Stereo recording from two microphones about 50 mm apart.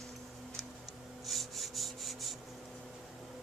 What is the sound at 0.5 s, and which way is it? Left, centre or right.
Rub, centre.